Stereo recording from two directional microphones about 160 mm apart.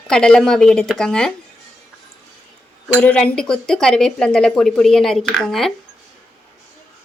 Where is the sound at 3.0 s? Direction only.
5° left (ahead or behind).